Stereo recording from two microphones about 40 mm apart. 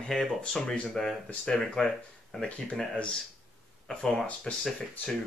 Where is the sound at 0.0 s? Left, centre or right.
Centre.